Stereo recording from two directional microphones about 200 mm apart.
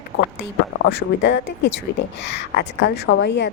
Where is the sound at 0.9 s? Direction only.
55° left (ahead or behind).